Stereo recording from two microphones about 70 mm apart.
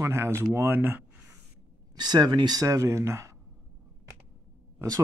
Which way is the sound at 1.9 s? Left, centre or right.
Right.